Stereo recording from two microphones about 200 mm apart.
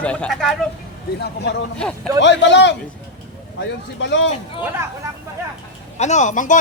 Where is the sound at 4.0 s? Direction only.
65° left (ahead or behind).